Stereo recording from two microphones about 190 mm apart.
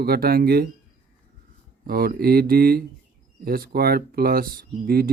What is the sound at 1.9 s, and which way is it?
Speech, 55° right (ahead or behind).